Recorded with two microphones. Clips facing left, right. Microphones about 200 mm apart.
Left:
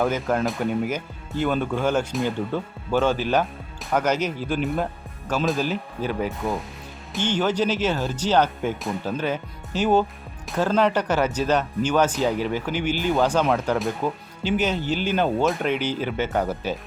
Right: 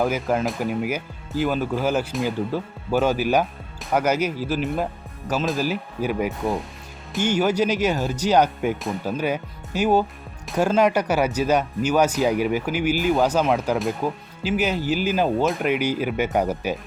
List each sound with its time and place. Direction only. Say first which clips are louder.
0.0 s speech: right 1 dB; centre (ahead or behind)